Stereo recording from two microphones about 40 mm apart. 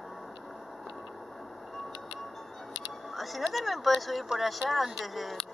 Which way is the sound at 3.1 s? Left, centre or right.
Centre.